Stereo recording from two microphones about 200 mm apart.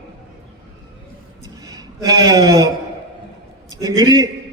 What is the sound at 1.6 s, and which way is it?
Speech, 20° right (ahead or behind).